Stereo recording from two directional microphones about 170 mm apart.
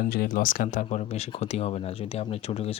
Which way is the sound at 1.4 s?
40° left (ahead or behind).